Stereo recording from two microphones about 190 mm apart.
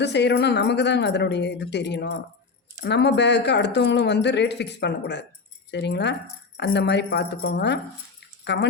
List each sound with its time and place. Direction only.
0.0 s speech: 65° left (ahead or behind)